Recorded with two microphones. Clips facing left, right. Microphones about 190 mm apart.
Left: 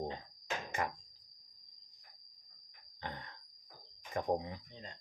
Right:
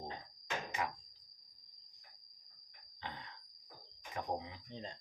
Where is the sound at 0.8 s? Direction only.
50° left (ahead or behind).